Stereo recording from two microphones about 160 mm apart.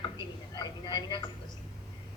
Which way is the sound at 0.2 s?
25° left (ahead or behind).